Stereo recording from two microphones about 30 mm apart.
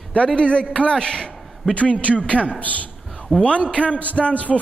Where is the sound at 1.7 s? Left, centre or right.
Left.